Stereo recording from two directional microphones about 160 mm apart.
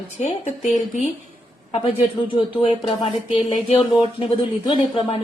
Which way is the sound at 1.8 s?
35° left (ahead or behind).